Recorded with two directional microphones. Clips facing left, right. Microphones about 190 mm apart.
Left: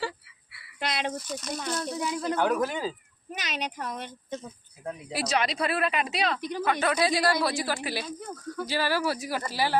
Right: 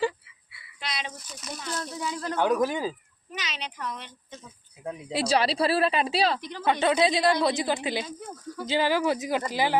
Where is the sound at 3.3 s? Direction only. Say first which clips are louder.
Left 3 dB; 50° left (ahead or behind).